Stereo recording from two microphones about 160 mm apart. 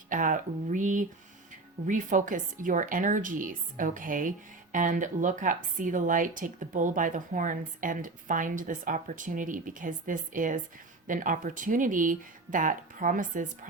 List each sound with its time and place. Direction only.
0.1 s speech: 55° right (ahead or behind)